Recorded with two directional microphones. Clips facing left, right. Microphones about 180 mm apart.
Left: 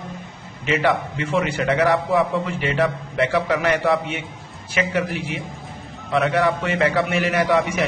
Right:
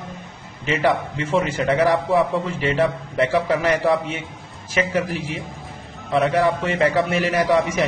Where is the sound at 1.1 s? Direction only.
35° right (ahead or behind).